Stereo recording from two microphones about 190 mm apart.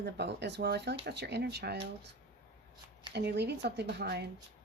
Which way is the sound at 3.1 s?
60° right (ahead or behind).